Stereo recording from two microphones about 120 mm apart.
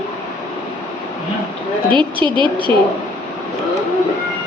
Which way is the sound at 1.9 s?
40° right (ahead or behind).